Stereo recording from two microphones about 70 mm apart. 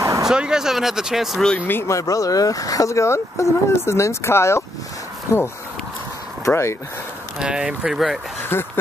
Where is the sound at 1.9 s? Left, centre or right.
Left.